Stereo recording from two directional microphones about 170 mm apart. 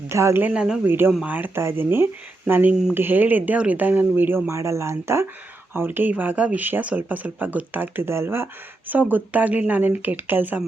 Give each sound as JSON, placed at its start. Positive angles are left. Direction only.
{"t": 0.1, "sound": "speech", "side_deg": -15}